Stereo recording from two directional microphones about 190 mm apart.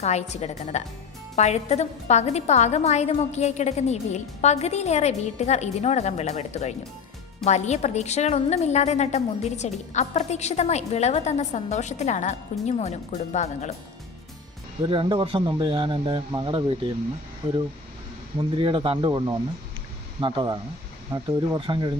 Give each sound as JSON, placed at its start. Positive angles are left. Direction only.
{"t": 0.0, "sound": "a woman's voice", "side_deg": 35}
{"t": 14.8, "sound": "speech", "side_deg": -25}
{"t": 18.3, "sound": "speech", "side_deg": -25}